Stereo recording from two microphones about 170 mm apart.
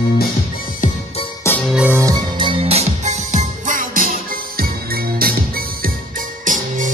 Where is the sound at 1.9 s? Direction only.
20° right (ahead or behind); by 5.9 s 60° right (ahead or behind).